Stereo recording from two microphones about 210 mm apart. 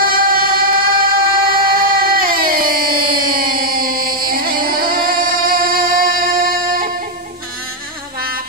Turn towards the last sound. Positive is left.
turn(degrees=-40)  # may be behind; listen again after turning